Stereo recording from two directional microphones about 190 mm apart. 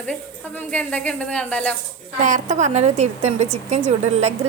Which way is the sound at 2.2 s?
40° right (ahead or behind).